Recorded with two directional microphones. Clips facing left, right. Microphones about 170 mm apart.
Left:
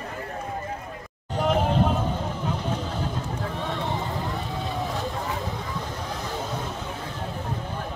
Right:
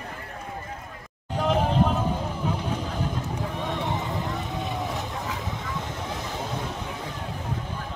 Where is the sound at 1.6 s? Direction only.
10° right (ahead or behind).